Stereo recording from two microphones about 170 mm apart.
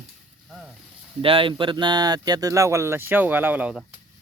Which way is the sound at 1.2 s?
30° right (ahead or behind).